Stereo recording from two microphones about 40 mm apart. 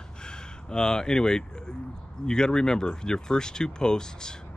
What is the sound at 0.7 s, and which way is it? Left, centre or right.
Speech, centre.